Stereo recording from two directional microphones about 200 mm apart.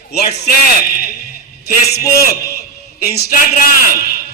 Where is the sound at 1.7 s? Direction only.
50° left (ahead or behind).